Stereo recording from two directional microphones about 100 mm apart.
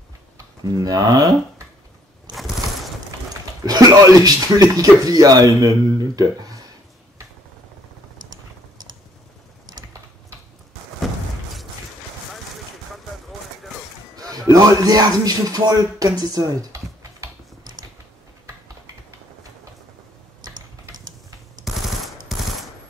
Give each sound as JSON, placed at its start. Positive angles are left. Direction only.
{"t": 0.7, "sound": "speech", "side_deg": -40}
{"t": 3.6, "sound": "speech", "side_deg": -40}
{"t": 14.1, "sound": "speech", "side_deg": -40}
{"t": 21.6, "sound": "machine gun", "side_deg": 0}